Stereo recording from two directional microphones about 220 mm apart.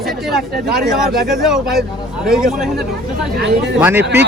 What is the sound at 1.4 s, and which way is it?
A man's voice, centre (ahead or behind).